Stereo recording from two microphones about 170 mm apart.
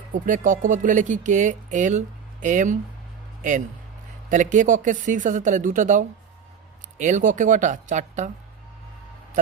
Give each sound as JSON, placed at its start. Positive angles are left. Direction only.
{"t": 0.1, "sound": "speech", "side_deg": -50}
{"t": 4.3, "sound": "speech", "side_deg": -50}